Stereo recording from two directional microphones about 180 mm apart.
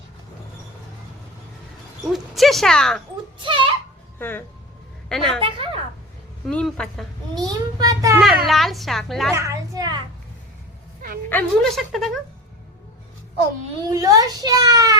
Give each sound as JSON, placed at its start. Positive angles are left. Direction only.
{"t": 2.1, "sound": "speech", "side_deg": 0}
{"t": 3.4, "sound": "a child's voice", "side_deg": -30}
{"t": 4.2, "sound": "a woman's voice", "side_deg": 10}
{"t": 5.4, "sound": "a sound", "side_deg": -30}
{"t": 6.5, "sound": "speech", "side_deg": 5}
{"t": 7.4, "sound": "a child's voice", "side_deg": -20}
{"t": 8.2, "sound": "speech", "side_deg": 0}
{"t": 9.3, "sound": "a sound", "side_deg": -15}
{"t": 11.3, "sound": "speech", "side_deg": 5}
{"t": 13.9, "sound": "a child's voice", "side_deg": -20}